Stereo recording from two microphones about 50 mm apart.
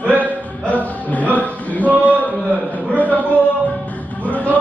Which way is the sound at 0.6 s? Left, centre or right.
Left.